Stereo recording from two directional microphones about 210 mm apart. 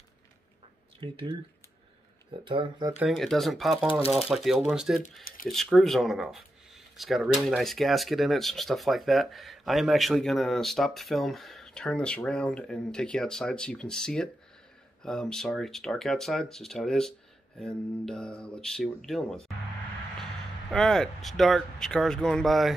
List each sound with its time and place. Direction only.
1.0 s speech: 25° right (ahead or behind)
2.4 s speech: 25° right (ahead or behind)
3.0 s speech: centre (ahead or behind)
20.7 s speech: centre (ahead or behind)